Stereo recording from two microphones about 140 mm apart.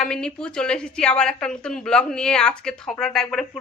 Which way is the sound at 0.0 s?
5° left (ahead or behind).